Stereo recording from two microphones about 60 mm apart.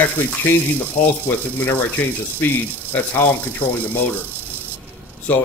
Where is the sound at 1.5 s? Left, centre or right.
Left.